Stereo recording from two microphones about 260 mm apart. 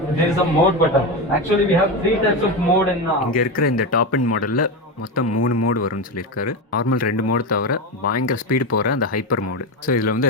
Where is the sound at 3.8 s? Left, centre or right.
Left.